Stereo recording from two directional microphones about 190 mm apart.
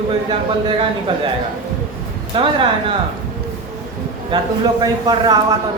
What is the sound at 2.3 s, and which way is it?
Speech, 25° right (ahead or behind).